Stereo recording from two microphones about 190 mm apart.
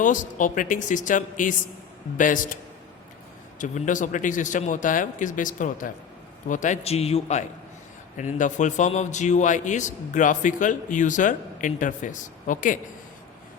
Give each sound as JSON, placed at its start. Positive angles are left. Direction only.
{"t": 0.0, "sound": "speech", "side_deg": 45}
{"t": 3.6, "sound": "a man's voice", "side_deg": 40}